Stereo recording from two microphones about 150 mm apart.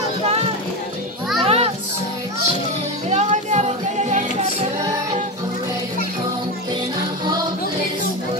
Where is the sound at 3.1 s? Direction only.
50° right (ahead or behind).